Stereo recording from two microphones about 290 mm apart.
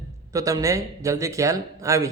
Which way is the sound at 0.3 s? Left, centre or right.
Centre.